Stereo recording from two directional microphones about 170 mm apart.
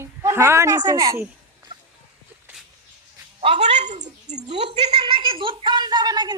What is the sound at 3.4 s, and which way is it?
A woman's voice, 35° right (ahead or behind).